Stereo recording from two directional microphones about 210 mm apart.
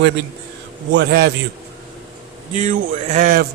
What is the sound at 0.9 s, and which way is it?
Speech, 50° right (ahead or behind).